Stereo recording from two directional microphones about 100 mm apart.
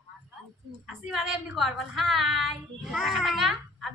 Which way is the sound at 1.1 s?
Centre (ahead or behind).